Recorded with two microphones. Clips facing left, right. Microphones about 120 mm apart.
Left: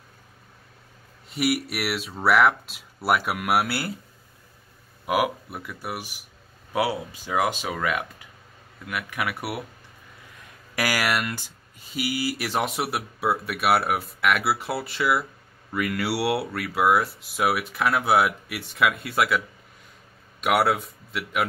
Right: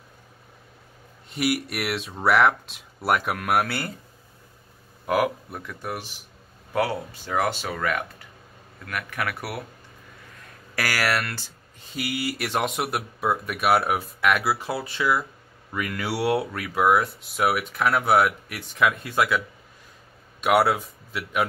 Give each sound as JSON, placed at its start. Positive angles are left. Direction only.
{"t": 1.3, "sound": "speech", "side_deg": 0}
{"t": 5.0, "sound": "speech", "side_deg": 10}
{"t": 10.8, "sound": "speech", "side_deg": 15}